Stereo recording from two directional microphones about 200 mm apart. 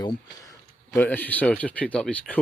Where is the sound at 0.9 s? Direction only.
10° left (ahead or behind).